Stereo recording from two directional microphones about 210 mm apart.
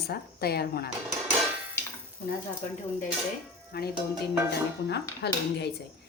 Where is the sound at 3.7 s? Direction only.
45° left (ahead or behind).